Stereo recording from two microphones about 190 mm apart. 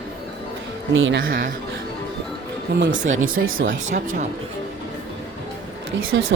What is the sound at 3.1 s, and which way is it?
Speech, 90° right.